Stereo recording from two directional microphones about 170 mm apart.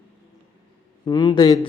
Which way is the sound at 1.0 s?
25° left (ahead or behind).